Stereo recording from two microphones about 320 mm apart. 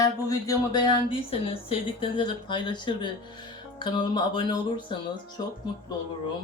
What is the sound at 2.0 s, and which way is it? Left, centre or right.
A woman's voice, centre.